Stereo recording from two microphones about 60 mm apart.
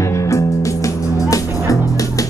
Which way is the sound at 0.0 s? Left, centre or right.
Left.